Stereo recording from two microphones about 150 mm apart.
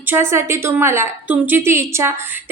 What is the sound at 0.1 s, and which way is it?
A woman's voice, 15° right (ahead or behind).